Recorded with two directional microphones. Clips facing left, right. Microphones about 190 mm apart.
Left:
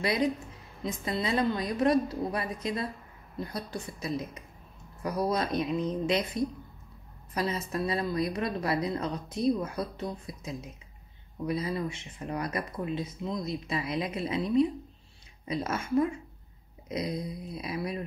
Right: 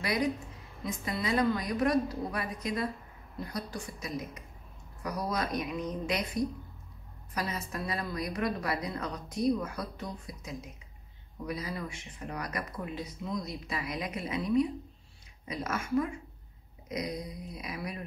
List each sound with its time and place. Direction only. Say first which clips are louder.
0.0 s speech: left 3 dB; 25° left (ahead or behind)